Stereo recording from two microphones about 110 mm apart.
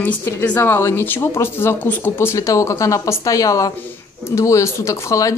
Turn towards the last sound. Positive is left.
turn(degrees=30)  # may be behind; listen again after turning